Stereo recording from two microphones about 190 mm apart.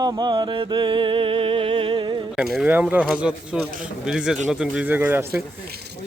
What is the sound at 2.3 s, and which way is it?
Speech, 5° right (ahead or behind).